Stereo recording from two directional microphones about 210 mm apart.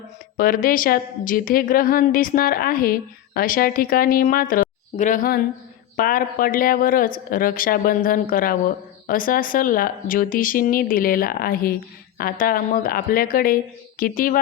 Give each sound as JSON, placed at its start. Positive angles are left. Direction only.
{"t": 0.3, "sound": "speech", "side_deg": 45}